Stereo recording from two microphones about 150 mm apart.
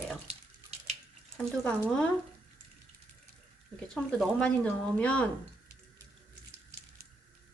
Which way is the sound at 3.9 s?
5° left (ahead or behind).